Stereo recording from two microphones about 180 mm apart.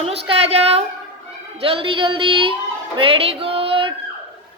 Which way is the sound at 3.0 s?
30° right (ahead or behind).